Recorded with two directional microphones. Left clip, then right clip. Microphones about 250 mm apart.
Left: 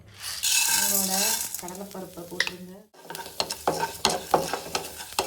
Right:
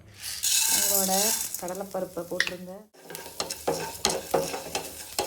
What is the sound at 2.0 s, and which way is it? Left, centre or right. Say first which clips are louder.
Speech: even; centre.